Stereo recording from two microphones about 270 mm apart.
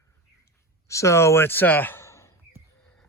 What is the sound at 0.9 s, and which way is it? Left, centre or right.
Speech, centre.